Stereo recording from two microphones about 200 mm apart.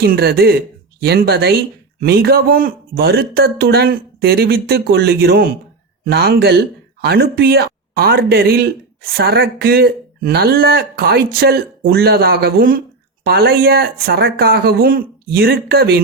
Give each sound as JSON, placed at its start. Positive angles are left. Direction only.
{"t": 0.0, "sound": "speech", "side_deg": -50}